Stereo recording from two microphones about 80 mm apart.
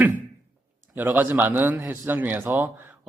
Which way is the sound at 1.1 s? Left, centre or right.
Right.